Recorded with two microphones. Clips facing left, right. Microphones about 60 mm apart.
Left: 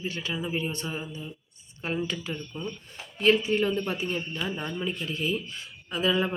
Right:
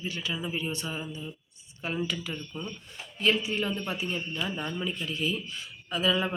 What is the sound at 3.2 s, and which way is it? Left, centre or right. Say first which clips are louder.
Speech: left 5 dB; left.